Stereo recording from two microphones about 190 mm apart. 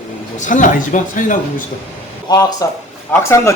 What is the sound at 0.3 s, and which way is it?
Speech, 40° left (ahead or behind).